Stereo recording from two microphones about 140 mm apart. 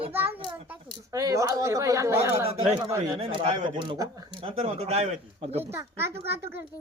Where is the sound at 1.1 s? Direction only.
25° right (ahead or behind).